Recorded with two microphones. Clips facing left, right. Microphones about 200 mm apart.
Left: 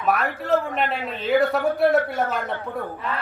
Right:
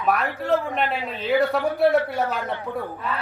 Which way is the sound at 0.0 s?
Centre (ahead or behind).